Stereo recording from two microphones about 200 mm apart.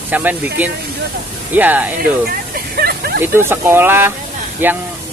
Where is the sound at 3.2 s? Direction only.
10° right (ahead or behind).